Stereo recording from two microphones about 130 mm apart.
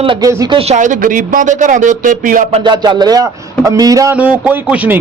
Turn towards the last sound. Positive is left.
turn(degrees=-15)  # may be behind; listen again after turning